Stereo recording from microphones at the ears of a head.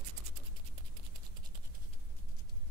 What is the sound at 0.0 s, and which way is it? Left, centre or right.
Scratch, right.